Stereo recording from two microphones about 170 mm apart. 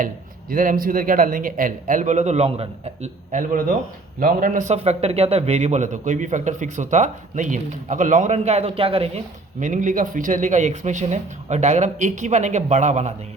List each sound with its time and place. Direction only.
0.5 s a man's voice: 55° right (ahead or behind); by 9.2 s 35° right (ahead or behind)
9.6 s a man's voice: 50° right (ahead or behind)